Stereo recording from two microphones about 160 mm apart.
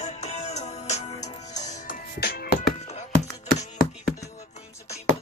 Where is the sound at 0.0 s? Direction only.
45° left (ahead or behind); by 2.5 s 70° left (ahead or behind).